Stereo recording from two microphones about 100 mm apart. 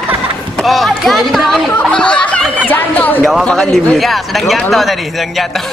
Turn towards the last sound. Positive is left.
turn(degrees=0)  # may be behind; listen again after turning